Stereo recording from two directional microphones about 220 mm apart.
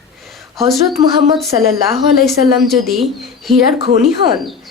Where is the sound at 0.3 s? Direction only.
Centre (ahead or behind).